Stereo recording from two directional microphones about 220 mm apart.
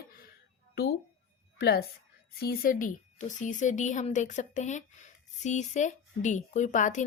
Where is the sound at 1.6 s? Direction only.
45° left (ahead or behind).